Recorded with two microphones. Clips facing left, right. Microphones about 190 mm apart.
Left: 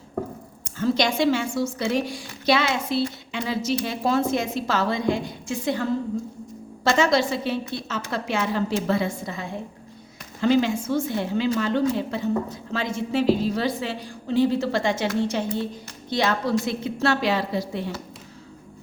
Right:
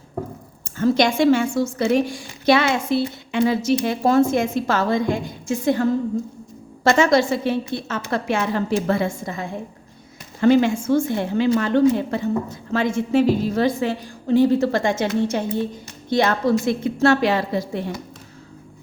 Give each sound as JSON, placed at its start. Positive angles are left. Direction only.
{"t": 0.6, "sound": "a woman's voice", "side_deg": -50}
{"t": 16.0, "sound": "a woman's voice", "side_deg": -50}